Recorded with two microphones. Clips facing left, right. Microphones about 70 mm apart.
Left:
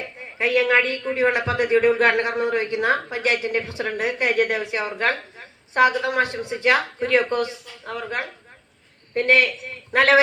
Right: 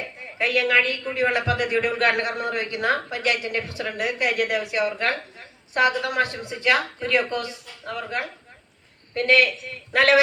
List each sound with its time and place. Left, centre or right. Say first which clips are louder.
0.3 s a man's voice: left 2 dB; left